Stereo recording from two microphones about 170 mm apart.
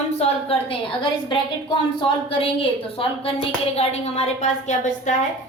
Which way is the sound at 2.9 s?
35° left (ahead or behind).